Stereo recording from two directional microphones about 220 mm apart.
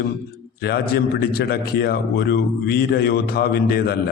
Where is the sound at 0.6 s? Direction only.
45° left (ahead or behind).